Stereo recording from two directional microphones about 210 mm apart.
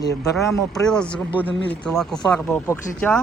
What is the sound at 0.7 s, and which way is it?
Speech, 5° left (ahead or behind).